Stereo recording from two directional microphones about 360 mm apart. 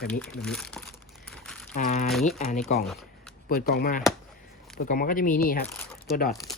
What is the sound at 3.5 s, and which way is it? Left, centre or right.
Speech, left.